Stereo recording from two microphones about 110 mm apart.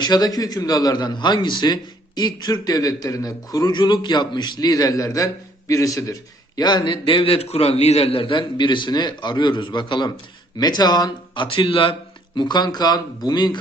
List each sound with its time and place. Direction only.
0.0 s a man's voice: 35° left (ahead or behind)
6.6 s a man's voice: 40° left (ahead or behind)
11.4 s a man's voice: 55° left (ahead or behind)
12.4 s a man's voice: 40° left (ahead or behind)